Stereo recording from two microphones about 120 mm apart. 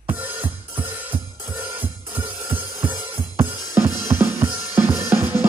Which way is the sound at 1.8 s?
15° right (ahead or behind).